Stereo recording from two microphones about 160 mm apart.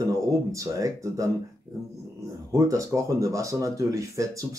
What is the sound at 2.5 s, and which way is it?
Speech, 20° right (ahead or behind).